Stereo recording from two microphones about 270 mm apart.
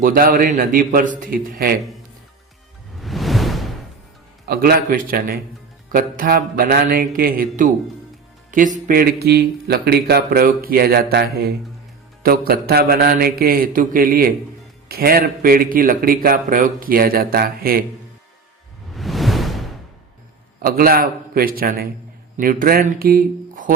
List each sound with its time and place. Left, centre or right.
0.0 s speech: right
3.0 s music: centre
4.4 s speech: right
18.9 s whoosh: centre
20.6 s speech: right